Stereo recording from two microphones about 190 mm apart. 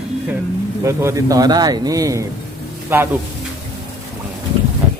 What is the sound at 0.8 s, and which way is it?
A man's voice, 15° right (ahead or behind).